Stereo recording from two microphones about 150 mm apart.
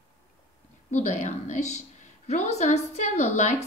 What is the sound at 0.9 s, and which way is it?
A woman's voice, 50° left (ahead or behind).